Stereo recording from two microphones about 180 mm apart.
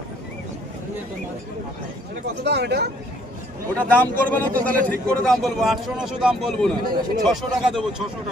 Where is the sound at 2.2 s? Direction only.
65° right (ahead or behind).